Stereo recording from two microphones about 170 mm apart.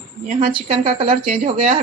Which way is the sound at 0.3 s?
35° right (ahead or behind).